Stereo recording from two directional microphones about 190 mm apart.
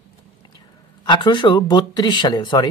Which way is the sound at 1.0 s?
25° left (ahead or behind).